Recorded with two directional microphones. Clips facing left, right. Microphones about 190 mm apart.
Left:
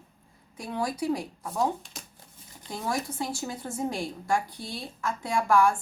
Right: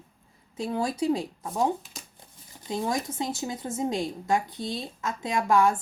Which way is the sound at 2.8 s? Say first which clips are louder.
Right 1 dB; 20° right (ahead or behind).